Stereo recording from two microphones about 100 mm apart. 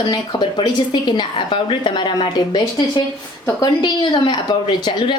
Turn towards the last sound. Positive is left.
turn(degrees=50)  # may be behind; listen again after turning